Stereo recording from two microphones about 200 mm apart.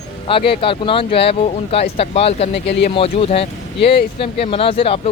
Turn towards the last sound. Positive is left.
turn(degrees=25)  # may be behind; listen again after turning